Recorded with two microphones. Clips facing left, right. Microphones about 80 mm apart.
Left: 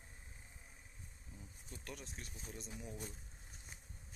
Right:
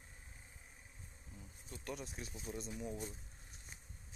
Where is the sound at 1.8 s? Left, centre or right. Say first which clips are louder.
Right 6 dB; centre.